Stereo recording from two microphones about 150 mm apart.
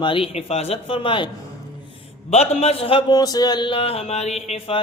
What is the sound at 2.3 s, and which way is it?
A man's voice, 45° left (ahead or behind).